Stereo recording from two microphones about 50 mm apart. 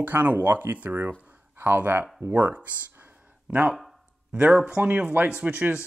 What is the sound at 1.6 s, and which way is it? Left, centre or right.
Speech, right.